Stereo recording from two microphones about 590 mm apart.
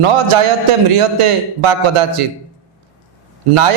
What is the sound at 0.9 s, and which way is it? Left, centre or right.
Speech, right.